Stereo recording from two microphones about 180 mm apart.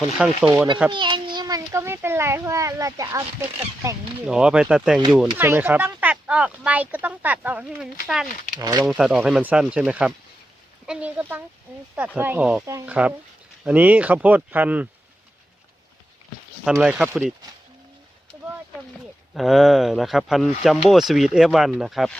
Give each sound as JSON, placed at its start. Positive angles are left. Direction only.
{"t": 0.2, "sound": "speech", "side_deg": -5}
{"t": 0.9, "sound": "speech", "side_deg": -25}
{"t": 4.3, "sound": "speech", "side_deg": -5}
{"t": 8.5, "sound": "speech", "side_deg": -20}
{"t": 8.8, "sound": "speech", "side_deg": -5}
{"t": 16.8, "sound": "speech", "side_deg": -5}
{"t": 19.3, "sound": "speech", "side_deg": 0}